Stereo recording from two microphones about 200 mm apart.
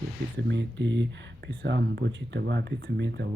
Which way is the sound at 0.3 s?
60° right (ahead or behind).